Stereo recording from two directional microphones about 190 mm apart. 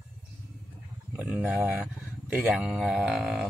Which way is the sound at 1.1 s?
10° right (ahead or behind).